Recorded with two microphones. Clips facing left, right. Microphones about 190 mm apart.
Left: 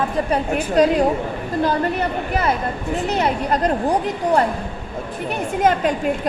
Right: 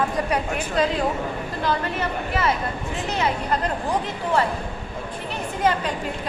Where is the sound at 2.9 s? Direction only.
40° left (ahead or behind).